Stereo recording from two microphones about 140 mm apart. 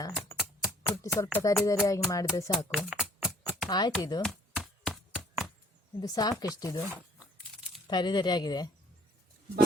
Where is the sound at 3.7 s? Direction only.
30° left (ahead or behind).